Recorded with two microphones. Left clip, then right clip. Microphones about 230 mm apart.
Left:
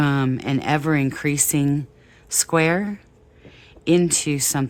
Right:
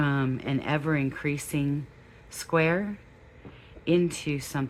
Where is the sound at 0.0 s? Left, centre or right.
Left.